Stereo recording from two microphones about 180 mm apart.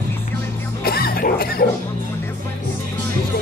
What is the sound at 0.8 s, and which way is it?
Cough, 55° left (ahead or behind).